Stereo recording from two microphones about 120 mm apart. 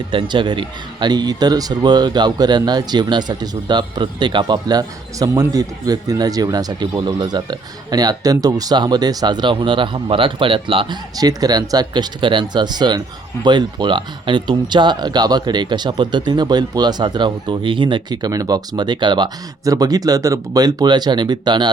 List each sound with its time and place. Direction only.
0.1 s speech: 40° right (ahead or behind)
11.2 s speech: 30° right (ahead or behind)